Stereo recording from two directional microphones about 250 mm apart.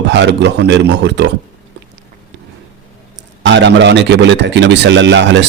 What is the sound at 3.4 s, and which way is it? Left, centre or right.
Speech, right.